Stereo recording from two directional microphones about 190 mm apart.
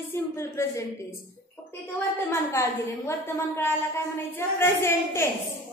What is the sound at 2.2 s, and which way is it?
A woman's voice, 15° left (ahead or behind).